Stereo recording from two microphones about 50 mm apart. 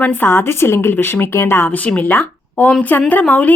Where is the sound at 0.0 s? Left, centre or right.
Left.